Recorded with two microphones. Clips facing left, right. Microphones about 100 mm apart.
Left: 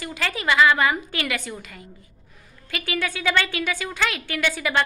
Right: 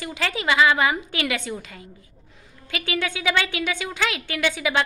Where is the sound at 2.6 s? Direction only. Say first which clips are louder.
Right 1 dB; 20° right (ahead or behind).